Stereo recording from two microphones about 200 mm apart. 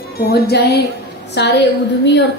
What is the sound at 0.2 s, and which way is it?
A woman's voice, 55° left (ahead or behind).